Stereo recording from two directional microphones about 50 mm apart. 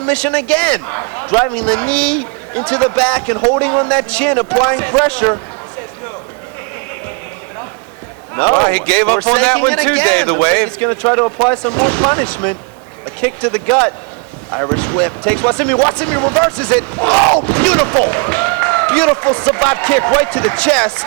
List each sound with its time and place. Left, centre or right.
0.0 s speech: left
8.6 s speech: left